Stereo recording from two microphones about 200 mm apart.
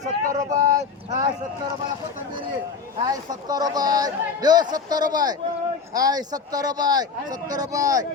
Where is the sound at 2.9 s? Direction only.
20° right (ahead or behind).